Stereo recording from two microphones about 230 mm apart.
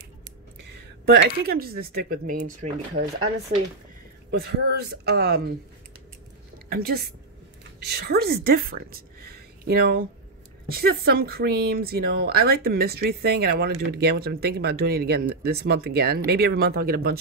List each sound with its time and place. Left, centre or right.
1.0 s speech: right
4.3 s speech: right
6.7 s a woman's voice: right